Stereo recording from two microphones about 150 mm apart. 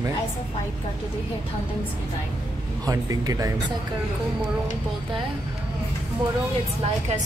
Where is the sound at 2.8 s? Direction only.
25° right (ahead or behind).